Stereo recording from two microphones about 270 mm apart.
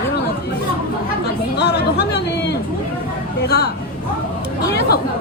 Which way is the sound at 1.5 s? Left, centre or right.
Left.